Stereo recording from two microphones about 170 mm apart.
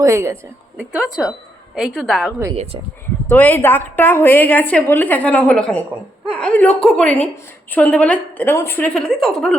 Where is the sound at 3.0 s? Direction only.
10° left (ahead or behind).